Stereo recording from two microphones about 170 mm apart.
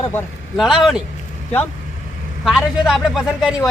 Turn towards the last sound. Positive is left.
turn(degrees=0)  # may be behind; listen again after turning